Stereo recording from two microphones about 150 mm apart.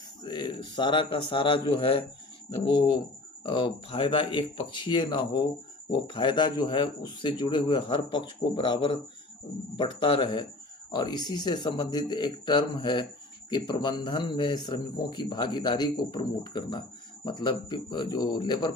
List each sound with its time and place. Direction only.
0.2 s a man's voice: 30° left (ahead or behind)